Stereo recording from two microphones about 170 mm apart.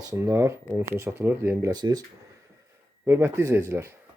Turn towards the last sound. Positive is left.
turn(degrees=-15)  # may be behind; listen again after turning